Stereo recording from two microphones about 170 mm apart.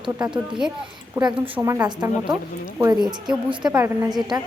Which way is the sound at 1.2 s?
30° right (ahead or behind).